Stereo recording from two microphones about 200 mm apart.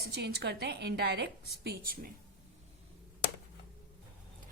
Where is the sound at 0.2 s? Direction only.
55° right (ahead or behind).